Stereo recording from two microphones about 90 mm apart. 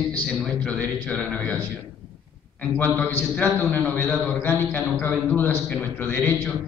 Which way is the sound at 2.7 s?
25° left (ahead or behind).